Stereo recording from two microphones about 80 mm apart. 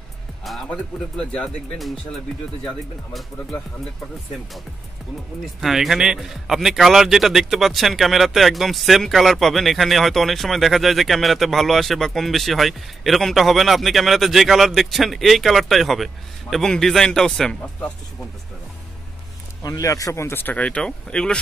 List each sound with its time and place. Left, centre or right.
0.4 s music: centre
1.1 s speech: centre
2.6 s speech: centre
5.4 s speech: centre
19.6 s speech: left; by 21.4 s centre